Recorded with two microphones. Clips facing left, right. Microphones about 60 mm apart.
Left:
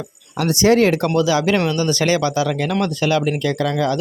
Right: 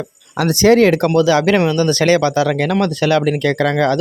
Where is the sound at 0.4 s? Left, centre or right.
Right.